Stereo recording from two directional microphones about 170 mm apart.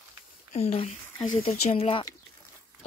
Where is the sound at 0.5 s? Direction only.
35° left (ahead or behind).